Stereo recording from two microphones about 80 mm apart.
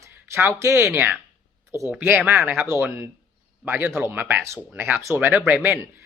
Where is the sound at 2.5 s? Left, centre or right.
Right.